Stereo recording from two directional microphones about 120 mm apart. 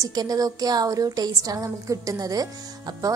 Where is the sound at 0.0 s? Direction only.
30° right (ahead or behind).